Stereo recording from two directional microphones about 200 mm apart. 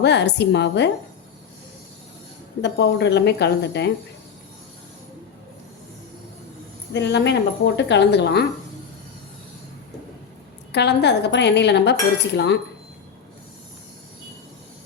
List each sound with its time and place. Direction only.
0.0 s speech: 60° left (ahead or behind)
2.6 s speech: 60° left (ahead or behind)
6.9 s speech: 60° left (ahead or behind)
10.7 s speech: 60° left (ahead or behind)